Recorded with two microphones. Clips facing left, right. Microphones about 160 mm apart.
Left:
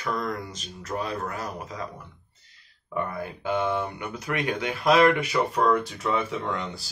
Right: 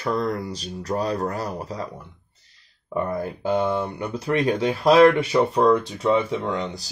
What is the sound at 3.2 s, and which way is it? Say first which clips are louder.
Speech: right 3 dB; 35° right (ahead or behind).